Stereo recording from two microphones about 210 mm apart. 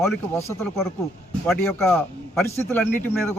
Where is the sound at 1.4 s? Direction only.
5° left (ahead or behind).